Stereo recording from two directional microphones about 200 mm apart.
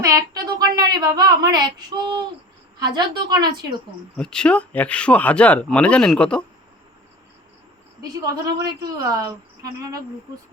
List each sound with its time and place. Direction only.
0.0 s speech: 15° right (ahead or behind)
4.2 s speech: 5° left (ahead or behind)
8.0 s a woman's voice: 20° right (ahead or behind)